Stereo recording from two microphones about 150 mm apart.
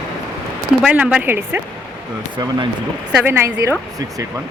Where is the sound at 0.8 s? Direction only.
10° right (ahead or behind).